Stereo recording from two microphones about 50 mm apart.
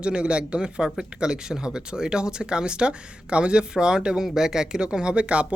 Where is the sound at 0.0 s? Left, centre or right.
Right.